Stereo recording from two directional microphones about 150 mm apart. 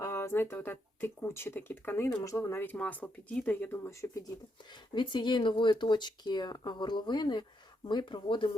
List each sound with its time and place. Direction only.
0.0 s speech: 15° left (ahead or behind)
4.9 s speech: 30° left (ahead or behind)